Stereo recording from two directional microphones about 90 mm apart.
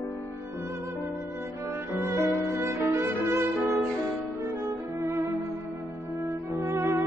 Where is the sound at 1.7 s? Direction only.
30° right (ahead or behind).